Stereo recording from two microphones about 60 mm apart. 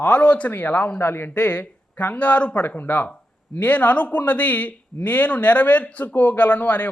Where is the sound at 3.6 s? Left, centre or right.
Left.